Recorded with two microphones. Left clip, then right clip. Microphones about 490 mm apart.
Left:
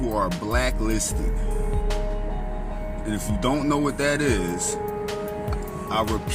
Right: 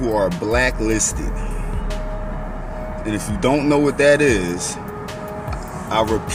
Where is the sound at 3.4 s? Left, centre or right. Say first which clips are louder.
Right 7 dB; left.